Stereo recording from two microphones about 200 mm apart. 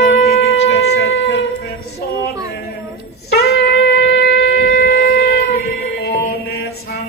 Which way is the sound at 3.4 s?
55° left (ahead or behind).